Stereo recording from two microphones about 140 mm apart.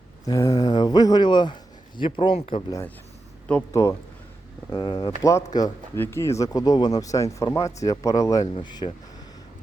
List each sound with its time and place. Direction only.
0.3 s speech: 25° left (ahead or behind); by 2.6 s 40° left (ahead or behind)
3.7 s speech: 25° left (ahead or behind)